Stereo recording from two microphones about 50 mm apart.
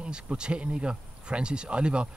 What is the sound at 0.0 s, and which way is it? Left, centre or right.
Speech, centre.